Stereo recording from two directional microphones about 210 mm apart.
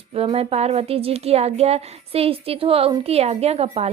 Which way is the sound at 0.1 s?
30° right (ahead or behind).